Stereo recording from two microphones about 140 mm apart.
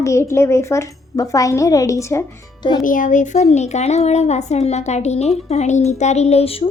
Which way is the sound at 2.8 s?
70° left (ahead or behind).